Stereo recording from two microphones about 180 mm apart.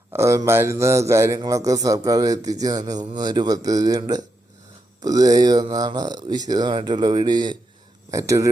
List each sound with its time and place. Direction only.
0.1 s a man's voice: 15° right (ahead or behind)